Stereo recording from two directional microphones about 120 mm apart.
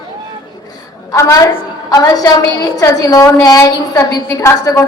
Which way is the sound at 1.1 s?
25° left (ahead or behind).